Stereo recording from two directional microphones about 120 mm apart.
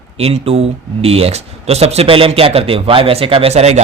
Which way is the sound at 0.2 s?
55° right (ahead or behind).